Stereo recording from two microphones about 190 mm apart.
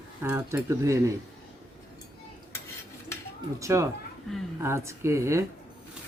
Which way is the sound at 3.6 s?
15° right (ahead or behind).